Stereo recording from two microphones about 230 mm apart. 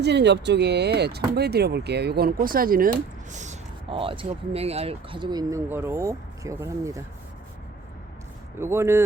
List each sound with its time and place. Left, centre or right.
0.0 s speech: right; by 7.0 s centre
8.5 s speech: centre